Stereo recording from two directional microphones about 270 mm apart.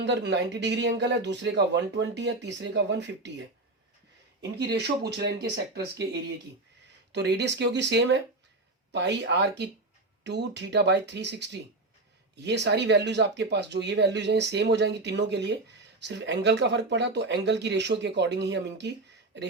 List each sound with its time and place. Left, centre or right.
0.0 s speech: right
4.7 s speech: right
7.1 s speech: right